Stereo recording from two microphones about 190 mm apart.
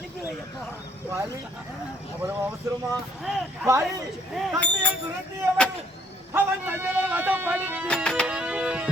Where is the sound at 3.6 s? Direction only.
15° right (ahead or behind).